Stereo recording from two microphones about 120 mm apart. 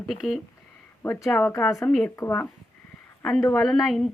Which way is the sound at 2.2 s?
25° left (ahead or behind).